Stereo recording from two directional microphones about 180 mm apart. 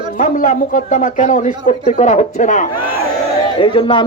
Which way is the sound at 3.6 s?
30° left (ahead or behind).